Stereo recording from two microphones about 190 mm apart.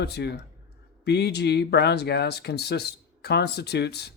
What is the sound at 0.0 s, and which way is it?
Speech, 60° left (ahead or behind).